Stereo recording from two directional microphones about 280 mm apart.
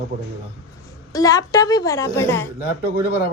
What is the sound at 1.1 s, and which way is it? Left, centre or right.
A woman's voice, centre.